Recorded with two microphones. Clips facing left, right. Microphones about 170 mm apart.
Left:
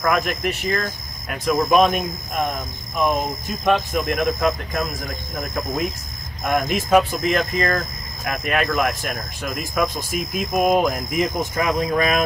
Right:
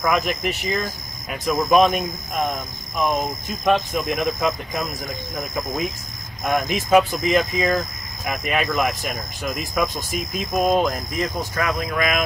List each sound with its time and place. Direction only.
0.0 s speech: centre (ahead or behind)
3.6 s speech: centre (ahead or behind)
11.3 s speech: 20° left (ahead or behind)